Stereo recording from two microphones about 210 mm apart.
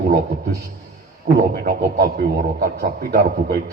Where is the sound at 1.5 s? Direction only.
50° right (ahead or behind).